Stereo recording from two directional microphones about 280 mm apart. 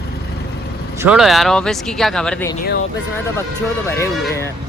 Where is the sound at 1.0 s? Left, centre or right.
Centre.